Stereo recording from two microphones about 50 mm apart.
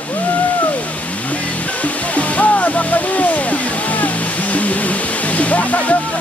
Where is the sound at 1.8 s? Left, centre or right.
Left.